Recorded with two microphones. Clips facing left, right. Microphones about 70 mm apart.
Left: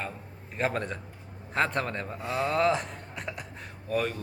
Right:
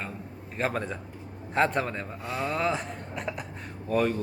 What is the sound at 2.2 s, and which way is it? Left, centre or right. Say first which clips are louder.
Speech: left 4 dB; left.